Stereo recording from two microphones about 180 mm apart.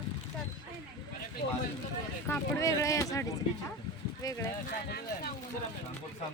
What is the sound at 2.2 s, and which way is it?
Speech, 10° left (ahead or behind).